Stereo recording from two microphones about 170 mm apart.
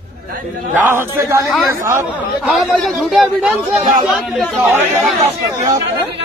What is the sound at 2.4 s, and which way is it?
A man's voice, centre (ahead or behind).